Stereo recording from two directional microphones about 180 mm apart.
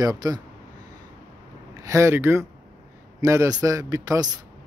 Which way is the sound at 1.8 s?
15° right (ahead or behind).